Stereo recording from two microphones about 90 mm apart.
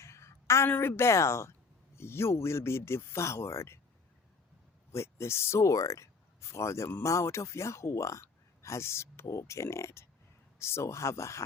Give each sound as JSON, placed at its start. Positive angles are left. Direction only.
{"t": 0.0, "sound": "a sound", "side_deg": 30}
{"t": 0.7, "sound": "speech", "side_deg": 25}
{"t": 4.9, "sound": "speech", "side_deg": 30}